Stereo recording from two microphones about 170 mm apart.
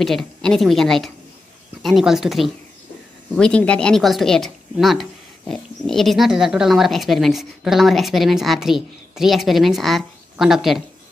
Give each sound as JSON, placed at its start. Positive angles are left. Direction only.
{"t": 0.0, "sound": "speech", "side_deg": 0}